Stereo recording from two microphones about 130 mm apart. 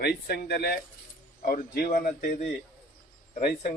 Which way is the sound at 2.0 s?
90° left.